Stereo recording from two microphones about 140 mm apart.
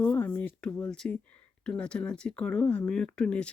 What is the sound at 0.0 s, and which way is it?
Speech, 10° left (ahead or behind).